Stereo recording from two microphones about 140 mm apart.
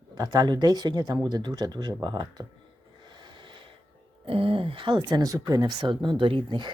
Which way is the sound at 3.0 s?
35° right (ahead or behind).